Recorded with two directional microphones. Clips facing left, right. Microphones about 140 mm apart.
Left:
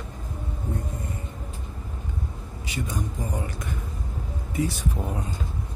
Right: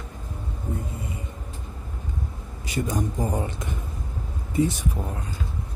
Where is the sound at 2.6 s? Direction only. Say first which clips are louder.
Right 5 dB; 40° right (ahead or behind).